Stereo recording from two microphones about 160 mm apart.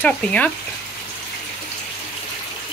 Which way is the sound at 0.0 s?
10° left (ahead or behind).